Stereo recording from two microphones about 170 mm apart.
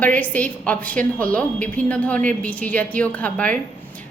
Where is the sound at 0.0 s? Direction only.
10° left (ahead or behind).